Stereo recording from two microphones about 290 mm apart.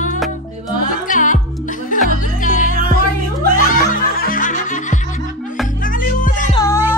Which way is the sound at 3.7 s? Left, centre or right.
Left.